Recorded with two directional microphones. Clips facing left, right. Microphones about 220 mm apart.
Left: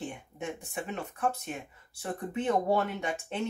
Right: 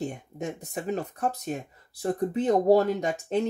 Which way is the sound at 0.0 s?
40° right (ahead or behind).